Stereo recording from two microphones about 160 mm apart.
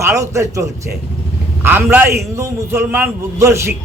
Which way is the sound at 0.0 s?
20° right (ahead or behind).